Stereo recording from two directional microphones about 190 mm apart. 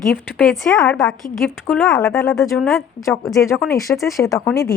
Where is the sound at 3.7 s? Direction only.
15° left (ahead or behind).